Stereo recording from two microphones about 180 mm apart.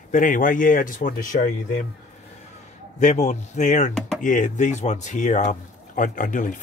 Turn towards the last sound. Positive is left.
turn(degrees=45)  # may be behind; listen again after turning